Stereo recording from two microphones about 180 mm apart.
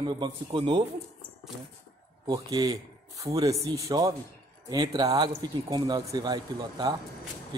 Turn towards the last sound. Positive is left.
turn(degrees=-20)  # may be behind; listen again after turning